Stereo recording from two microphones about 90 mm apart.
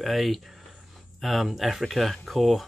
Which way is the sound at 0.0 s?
Centre (ahead or behind).